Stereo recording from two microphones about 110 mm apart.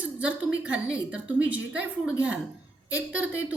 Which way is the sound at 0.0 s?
10° right (ahead or behind).